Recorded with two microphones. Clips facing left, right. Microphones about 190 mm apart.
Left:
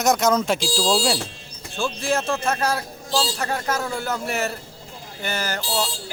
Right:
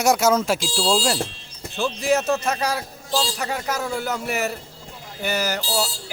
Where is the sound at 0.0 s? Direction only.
10° right (ahead or behind).